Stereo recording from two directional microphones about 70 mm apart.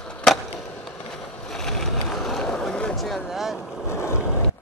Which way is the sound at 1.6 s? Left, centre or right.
Centre.